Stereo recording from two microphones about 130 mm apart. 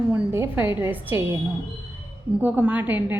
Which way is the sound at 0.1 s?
15° right (ahead or behind).